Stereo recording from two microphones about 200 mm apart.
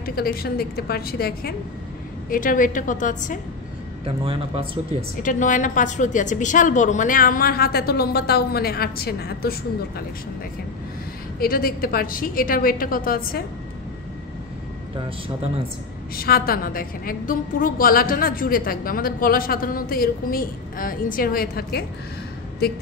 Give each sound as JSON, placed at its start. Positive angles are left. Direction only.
{"t": 0.0, "sound": "a woman's voice", "side_deg": 50}
{"t": 4.0, "sound": "a man's voice", "side_deg": -30}
{"t": 5.2, "sound": "a woman's voice", "side_deg": 40}
{"t": 11.3, "sound": "a woman's voice", "side_deg": 50}
{"t": 15.0, "sound": "a man's voice", "side_deg": -30}
{"t": 16.2, "sound": "a woman's voice", "side_deg": 50}